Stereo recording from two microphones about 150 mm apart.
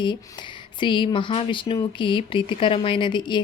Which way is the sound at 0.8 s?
30° left (ahead or behind).